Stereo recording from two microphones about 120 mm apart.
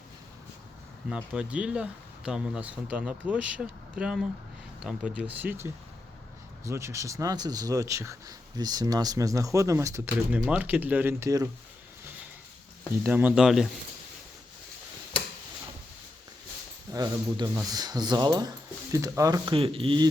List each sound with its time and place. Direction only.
1.1 s speech: 10° right (ahead or behind); by 10.0 s 25° right (ahead or behind)
10.5 s speech: 15° right (ahead or behind)
13.0 s speech: 15° right (ahead or behind)
16.9 s speech: 35° right (ahead or behind)
19.5 s speech: 50° right (ahead or behind)